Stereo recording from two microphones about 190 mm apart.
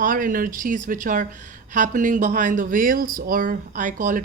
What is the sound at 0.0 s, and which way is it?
Speech, 45° right (ahead or behind).